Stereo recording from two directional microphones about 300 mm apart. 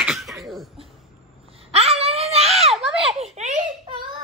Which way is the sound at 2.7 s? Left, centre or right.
Centre.